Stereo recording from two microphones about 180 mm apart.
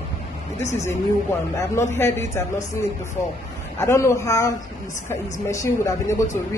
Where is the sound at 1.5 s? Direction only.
15° left (ahead or behind).